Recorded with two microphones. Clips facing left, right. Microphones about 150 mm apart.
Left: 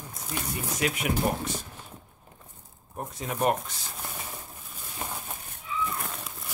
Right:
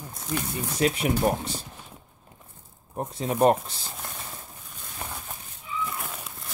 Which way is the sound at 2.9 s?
30° right (ahead or behind).